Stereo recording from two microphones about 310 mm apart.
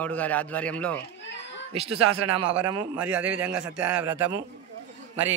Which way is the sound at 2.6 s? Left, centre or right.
Centre.